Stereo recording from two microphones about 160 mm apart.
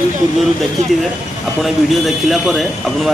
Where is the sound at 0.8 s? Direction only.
50° right (ahead or behind).